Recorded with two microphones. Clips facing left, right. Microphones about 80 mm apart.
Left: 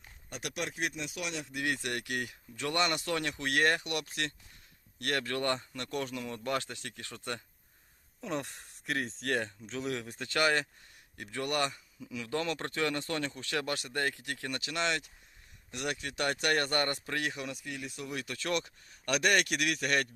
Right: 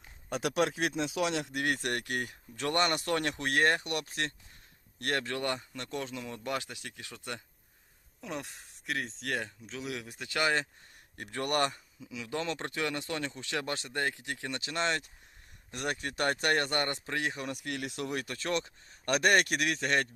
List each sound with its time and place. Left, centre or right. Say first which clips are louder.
1.3 s speech: right 5 dB; right
1.6 s speech: left 1 dB; right
5.2 s speech: left 1 dB; centre
8.2 s speech: left 3 dB; centre
10.2 s speech: left 1 dB; centre
11.2 s speech: right 2 dB; right
12.1 s speech: left 1 dB; centre
17.3 s speech: right 2 dB; right
17.6 s speech: right 4 dB; right
18.1 s speech: even; right
18.3 s speech: right 1 dB; right